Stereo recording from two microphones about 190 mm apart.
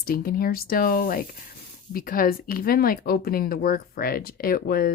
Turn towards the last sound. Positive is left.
turn(degrees=50)  # may be behind; listen again after turning